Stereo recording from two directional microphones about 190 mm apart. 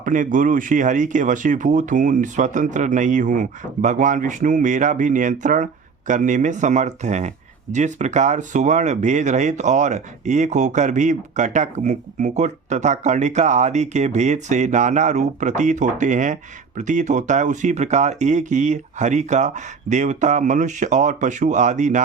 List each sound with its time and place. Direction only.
0.0 s speech: 45° right (ahead or behind)